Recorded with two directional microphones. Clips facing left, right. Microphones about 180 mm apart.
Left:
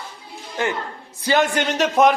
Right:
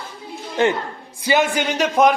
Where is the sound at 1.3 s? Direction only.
5° right (ahead or behind).